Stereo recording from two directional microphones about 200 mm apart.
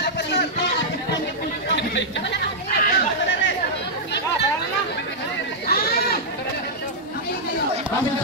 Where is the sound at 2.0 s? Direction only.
60° left (ahead or behind).